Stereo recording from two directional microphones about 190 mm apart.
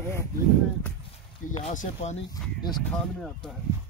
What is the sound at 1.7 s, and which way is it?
Speech, 45° left (ahead or behind).